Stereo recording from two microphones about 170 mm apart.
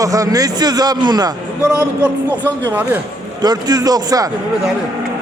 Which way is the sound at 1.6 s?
5° right (ahead or behind).